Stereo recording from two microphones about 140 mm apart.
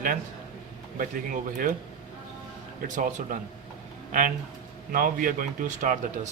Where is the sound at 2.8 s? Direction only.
65° right (ahead or behind).